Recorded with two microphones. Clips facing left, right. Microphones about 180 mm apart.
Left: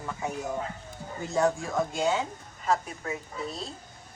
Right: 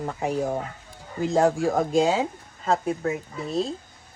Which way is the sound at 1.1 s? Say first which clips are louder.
Right 5 dB; 90° right.